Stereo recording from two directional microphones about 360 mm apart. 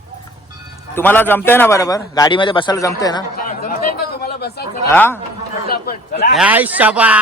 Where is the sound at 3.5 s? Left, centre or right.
Left.